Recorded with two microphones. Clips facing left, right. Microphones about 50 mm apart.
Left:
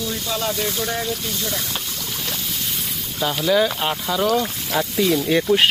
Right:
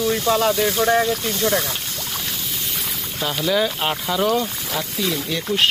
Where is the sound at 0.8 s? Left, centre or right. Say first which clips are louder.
Right 7 dB; right.